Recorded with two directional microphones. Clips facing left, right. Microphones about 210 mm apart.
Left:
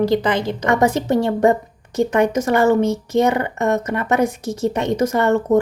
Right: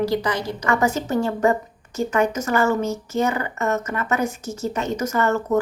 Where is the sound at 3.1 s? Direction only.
65° left (ahead or behind).